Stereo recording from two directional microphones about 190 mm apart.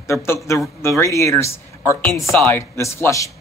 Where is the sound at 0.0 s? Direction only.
15° left (ahead or behind).